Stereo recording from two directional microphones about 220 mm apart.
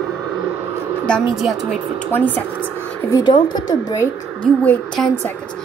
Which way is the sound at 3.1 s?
20° left (ahead or behind).